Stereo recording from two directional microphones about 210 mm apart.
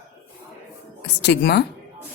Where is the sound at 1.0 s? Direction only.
55° left (ahead or behind).